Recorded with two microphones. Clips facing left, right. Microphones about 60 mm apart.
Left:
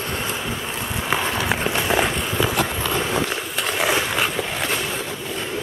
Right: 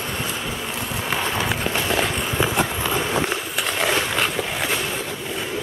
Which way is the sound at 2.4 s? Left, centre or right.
Centre.